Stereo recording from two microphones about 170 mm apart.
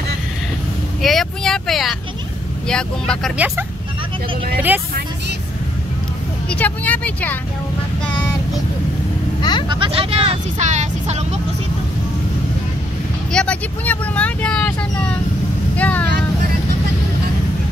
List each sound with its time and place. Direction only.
1.0 s vehicle: centre (ahead or behind)
2.7 s speech: 5° left (ahead or behind)
3.3 s speech: 10° right (ahead or behind)
6.5 s speech: 10° left (ahead or behind)
9.4 s vehicle: 25° left (ahead or behind)
9.7 s speech: 30° right (ahead or behind)
13.3 s speech: 5° left (ahead or behind)
15.7 s vehicle: 10° left (ahead or behind)